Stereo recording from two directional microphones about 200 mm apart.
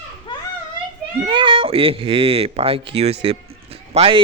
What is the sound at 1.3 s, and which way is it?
A man's voice, 25° right (ahead or behind).